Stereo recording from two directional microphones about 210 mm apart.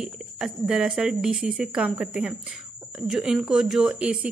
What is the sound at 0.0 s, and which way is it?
Speech, centre (ahead or behind).